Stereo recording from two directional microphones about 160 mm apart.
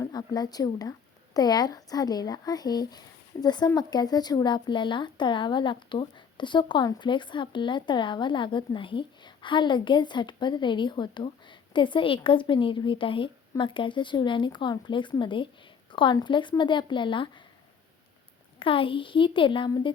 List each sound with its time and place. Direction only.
0.0 s speech: 25° left (ahead or behind)
18.6 s speech: 35° left (ahead or behind)